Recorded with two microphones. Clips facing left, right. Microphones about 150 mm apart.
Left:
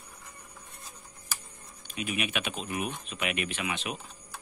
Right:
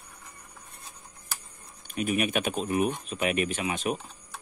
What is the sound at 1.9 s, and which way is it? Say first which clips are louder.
Speech: right 6 dB; 45° right (ahead or behind).